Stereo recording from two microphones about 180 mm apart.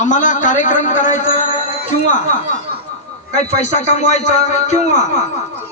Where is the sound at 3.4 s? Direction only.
40° left (ahead or behind).